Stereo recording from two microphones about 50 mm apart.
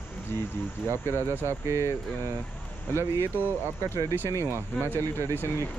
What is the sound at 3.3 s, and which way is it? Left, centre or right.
Speech, right.